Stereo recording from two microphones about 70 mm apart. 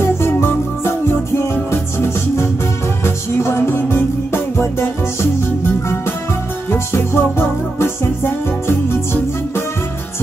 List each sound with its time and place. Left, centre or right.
0.0 s music: left
6.7 s music: left